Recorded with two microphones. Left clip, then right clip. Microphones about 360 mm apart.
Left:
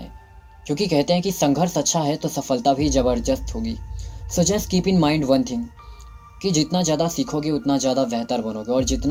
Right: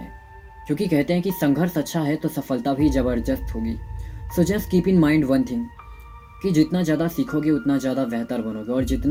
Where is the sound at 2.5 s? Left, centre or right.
Left.